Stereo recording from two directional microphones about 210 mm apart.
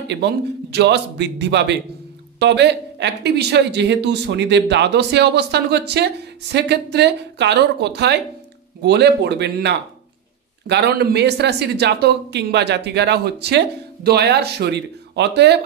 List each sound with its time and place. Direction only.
0.7 s a man's voice: 55° right (ahead or behind)